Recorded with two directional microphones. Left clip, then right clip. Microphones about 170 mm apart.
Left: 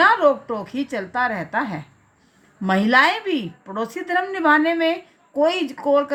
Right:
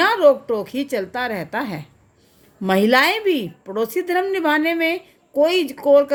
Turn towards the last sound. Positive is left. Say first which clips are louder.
# right 5 dB
turn(degrees=-45)  # may be behind; listen again after turning